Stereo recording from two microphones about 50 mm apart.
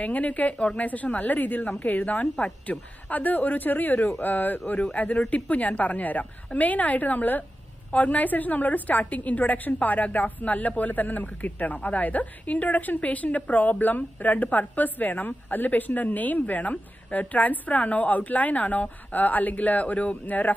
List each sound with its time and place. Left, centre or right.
0.0 s a woman's voice: left